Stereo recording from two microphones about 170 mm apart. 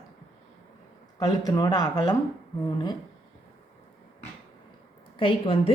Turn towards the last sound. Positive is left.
turn(degrees=30)  # may be behind; listen again after turning